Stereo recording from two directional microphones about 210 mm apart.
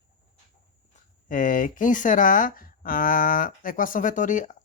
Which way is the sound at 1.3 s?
40° left (ahead or behind).